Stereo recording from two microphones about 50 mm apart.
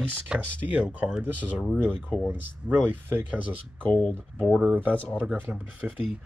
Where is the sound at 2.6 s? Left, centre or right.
Right.